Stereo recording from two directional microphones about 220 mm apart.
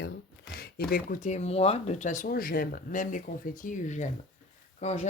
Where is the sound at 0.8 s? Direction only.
40° left (ahead or behind).